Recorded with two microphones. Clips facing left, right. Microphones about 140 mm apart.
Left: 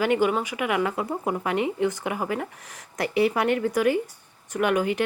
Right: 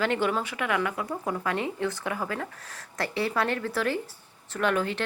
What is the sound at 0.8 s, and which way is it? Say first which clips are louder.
Speech: left 4 dB; 25° left (ahead or behind).